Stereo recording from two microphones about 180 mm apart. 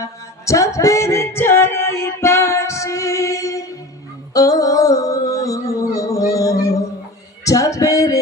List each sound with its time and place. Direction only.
0.0 s music: 15° left (ahead or behind)
4.4 s a sound: 20° left (ahead or behind)
7.4 s male singing: 20° left (ahead or behind)